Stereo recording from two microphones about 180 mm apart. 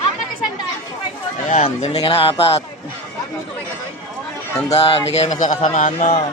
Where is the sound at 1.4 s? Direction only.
40° left (ahead or behind).